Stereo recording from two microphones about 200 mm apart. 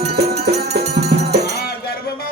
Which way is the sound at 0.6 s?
55° right (ahead or behind).